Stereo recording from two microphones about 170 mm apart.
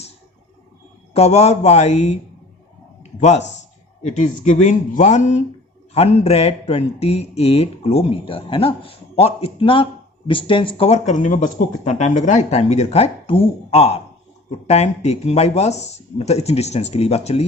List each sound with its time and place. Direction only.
1.1 s speech: 40° left (ahead or behind)
3.0 s a sound: 40° left (ahead or behind)
4.0 s speech: 45° left (ahead or behind)